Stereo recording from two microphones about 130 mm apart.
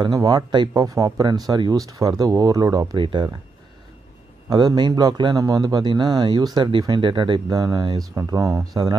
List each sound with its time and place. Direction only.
0.0 s speech: 30° right (ahead or behind)
4.5 s a man's voice: 35° right (ahead or behind)